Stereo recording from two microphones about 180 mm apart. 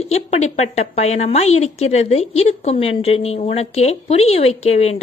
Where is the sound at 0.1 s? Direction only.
40° left (ahead or behind).